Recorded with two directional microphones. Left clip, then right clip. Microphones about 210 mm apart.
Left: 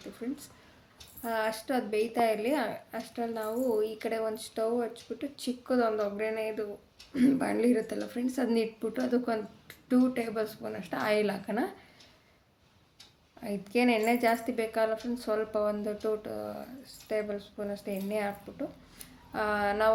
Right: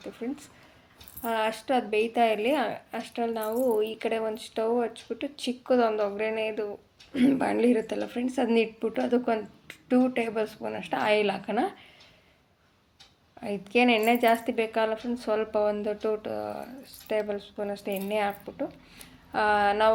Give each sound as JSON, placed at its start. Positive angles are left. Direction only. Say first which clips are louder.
{"t": 0.2, "sound": "a woman's voice", "louder": "right 2 dB", "side_deg": -5}
{"t": 13.4, "sound": "a woman's voice", "louder": "right 5 dB", "side_deg": 0}